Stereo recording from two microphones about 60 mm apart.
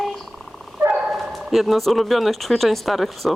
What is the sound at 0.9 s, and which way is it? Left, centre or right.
Bow-wow, centre.